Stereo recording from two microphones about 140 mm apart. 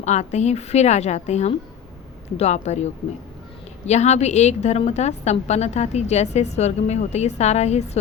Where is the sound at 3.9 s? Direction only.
55° left (ahead or behind).